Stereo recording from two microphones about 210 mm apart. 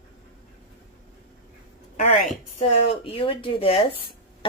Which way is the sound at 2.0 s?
35° left (ahead or behind).